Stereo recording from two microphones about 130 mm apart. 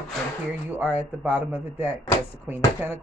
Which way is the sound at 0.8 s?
10° right (ahead or behind).